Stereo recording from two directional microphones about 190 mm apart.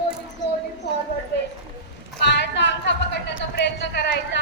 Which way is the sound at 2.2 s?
65° left (ahead or behind).